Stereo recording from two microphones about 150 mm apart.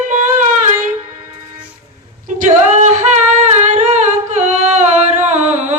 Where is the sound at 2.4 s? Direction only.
50° right (ahead or behind).